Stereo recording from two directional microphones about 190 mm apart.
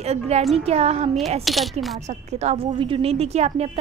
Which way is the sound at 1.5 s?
Centre (ahead or behind).